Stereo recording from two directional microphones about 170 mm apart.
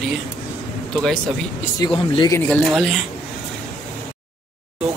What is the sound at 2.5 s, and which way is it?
Speech, centre (ahead or behind).